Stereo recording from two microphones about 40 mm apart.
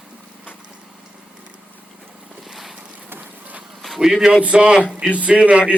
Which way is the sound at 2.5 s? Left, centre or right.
Centre.